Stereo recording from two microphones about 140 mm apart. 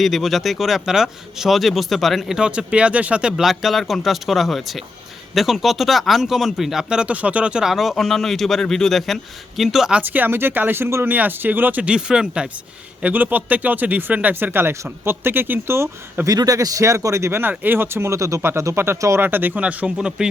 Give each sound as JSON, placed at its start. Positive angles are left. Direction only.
{"t": 0.0, "sound": "speech", "side_deg": 0}